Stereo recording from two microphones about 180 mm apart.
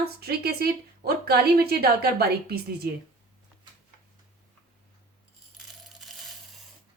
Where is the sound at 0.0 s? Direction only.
60° right (ahead or behind).